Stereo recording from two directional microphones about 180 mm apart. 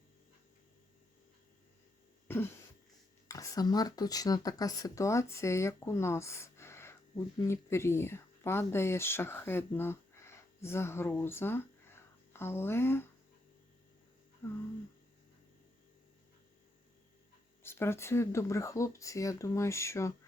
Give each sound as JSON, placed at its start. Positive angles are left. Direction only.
{"t": 2.2, "sound": "throat clearing", "side_deg": 15}
{"t": 3.2, "sound": "speech", "side_deg": 20}
{"t": 17.6, "sound": "speech", "side_deg": 15}